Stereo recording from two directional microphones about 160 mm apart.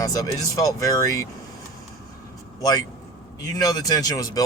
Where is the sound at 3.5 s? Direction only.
25° left (ahead or behind).